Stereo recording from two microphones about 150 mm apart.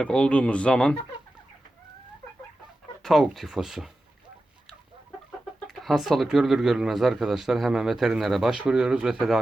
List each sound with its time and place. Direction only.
0.0 s speech: 5° left (ahead or behind)
3.0 s speech: centre (ahead or behind)
5.5 s speech: centre (ahead or behind)